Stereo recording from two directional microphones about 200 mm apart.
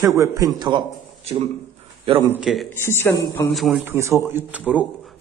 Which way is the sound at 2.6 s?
10° left (ahead or behind).